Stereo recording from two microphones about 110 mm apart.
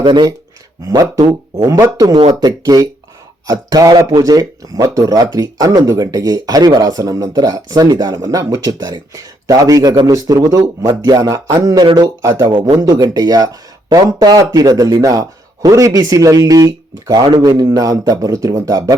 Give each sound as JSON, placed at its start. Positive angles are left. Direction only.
{"t": 0.0, "sound": "a man's voice", "side_deg": -40}